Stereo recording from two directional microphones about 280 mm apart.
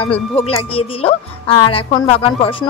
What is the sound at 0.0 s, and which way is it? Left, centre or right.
A woman's voice, centre.